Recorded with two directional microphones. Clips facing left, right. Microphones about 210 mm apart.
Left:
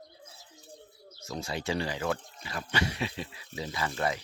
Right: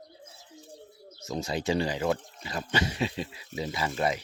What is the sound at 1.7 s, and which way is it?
Speech, 30° right (ahead or behind).